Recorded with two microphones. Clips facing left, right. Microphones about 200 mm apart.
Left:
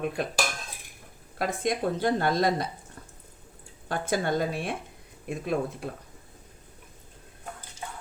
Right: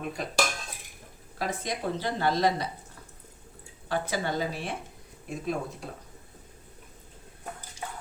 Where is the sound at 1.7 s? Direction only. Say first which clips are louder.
Left 8 dB; 50° left (ahead or behind).